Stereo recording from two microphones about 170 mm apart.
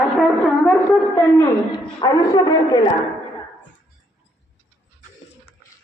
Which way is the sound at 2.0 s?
25° left (ahead or behind).